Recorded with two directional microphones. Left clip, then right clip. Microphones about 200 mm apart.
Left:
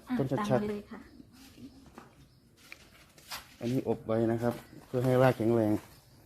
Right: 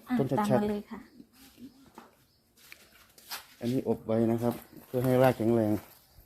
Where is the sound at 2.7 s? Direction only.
Centre (ahead or behind).